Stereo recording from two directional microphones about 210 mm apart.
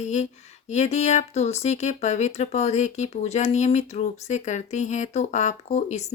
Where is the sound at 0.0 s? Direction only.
35° left (ahead or behind).